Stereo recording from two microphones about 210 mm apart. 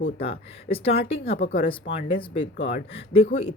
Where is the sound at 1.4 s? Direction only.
45° left (ahead or behind).